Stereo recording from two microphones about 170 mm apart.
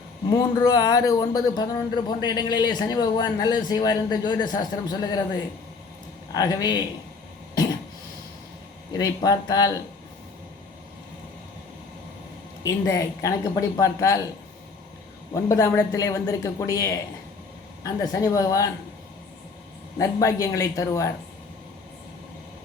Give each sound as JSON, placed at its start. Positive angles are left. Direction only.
{"t": 0.3, "sound": "speech", "side_deg": 20}
{"t": 6.3, "sound": "speech", "side_deg": 20}
{"t": 8.9, "sound": "speech", "side_deg": 25}
{"t": 12.6, "sound": "speech", "side_deg": 20}
{"t": 15.3, "sound": "speech", "side_deg": 20}
{"t": 20.0, "sound": "speech", "side_deg": 20}